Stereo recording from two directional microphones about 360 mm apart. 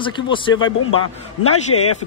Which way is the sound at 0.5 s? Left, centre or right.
Left.